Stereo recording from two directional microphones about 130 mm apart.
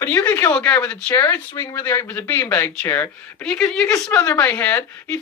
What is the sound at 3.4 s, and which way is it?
A man's voice, 5° left (ahead or behind).